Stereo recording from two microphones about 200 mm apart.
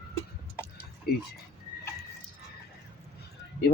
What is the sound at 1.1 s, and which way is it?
Speech, 50° left (ahead or behind).